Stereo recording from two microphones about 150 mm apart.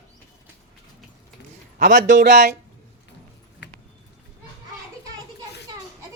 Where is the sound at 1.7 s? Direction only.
75° right (ahead or behind).